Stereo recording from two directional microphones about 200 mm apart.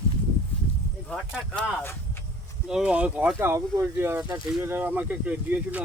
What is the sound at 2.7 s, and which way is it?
Speech, 5° right (ahead or behind).